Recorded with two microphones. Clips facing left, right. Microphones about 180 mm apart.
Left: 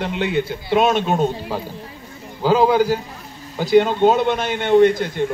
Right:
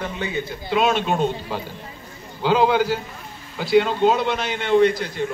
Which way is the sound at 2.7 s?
40° left (ahead or behind).